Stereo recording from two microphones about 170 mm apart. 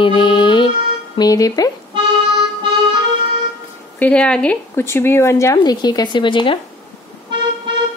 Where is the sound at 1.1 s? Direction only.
20° left (ahead or behind).